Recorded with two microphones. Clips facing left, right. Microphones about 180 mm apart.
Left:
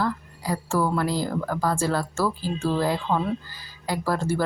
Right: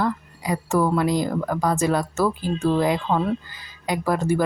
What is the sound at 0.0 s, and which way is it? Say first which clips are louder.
Speech: right 2 dB; 20° right (ahead or behind).